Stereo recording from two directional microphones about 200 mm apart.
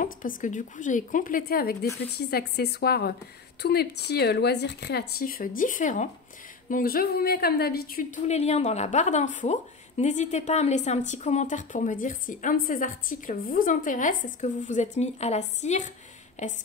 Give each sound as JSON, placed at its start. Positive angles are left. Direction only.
{"t": 0.4, "sound": "a woman's voice", "side_deg": 40}
{"t": 8.3, "sound": "a woman's voice", "side_deg": 30}